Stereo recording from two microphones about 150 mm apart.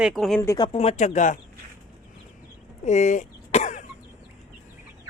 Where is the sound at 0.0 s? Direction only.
Centre (ahead or behind).